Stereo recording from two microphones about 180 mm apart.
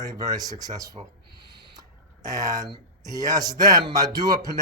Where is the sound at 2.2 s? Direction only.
20° right (ahead or behind).